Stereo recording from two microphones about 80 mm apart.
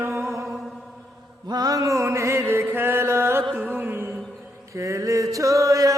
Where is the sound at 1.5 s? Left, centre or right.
Right.